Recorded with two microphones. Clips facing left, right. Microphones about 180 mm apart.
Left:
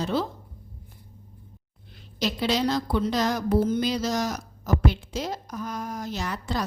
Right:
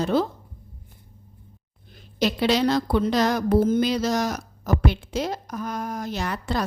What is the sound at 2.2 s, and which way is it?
A woman's voice, 65° right (ahead or behind).